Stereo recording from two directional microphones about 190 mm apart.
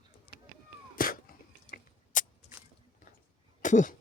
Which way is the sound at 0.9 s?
50° left (ahead or behind).